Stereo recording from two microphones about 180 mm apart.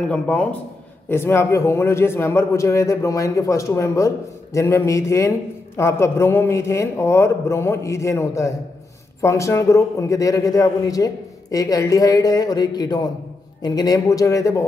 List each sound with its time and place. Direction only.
0.1 s a man's voice: 5° left (ahead or behind)